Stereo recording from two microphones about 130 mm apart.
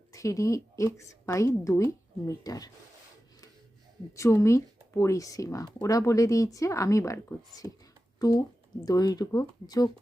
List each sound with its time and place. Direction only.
0.1 s speech: 25° left (ahead or behind)
4.1 s speech: 25° left (ahead or behind)
7.6 s speech: 30° right (ahead or behind)
8.2 s speech: 30° left (ahead or behind)